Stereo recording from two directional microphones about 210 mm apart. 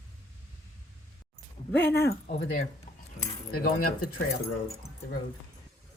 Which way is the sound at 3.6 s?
45° left (ahead or behind).